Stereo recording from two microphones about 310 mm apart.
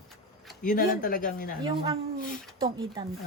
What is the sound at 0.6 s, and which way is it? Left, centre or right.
Speech, left.